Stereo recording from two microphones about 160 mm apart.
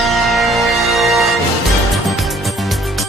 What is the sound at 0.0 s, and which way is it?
Music, centre (ahead or behind).